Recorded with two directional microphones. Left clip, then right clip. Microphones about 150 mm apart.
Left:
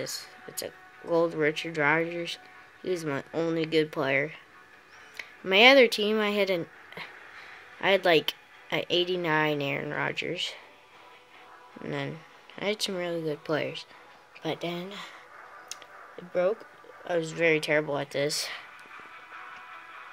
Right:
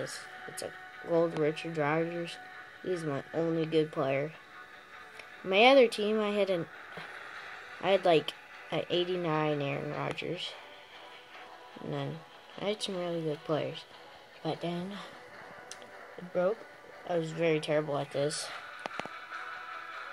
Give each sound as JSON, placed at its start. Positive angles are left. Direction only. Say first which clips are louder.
{"t": 0.6, "sound": "speech", "louder": "left 5 dB", "side_deg": 5}
{"t": 11.8, "sound": "speech", "louder": "left 4 dB", "side_deg": 5}
{"t": 17.0, "sound": "speech", "louder": "left 4 dB", "side_deg": 5}
{"t": 19.0, "sound": "music", "louder": "right 3 dB", "side_deg": -40}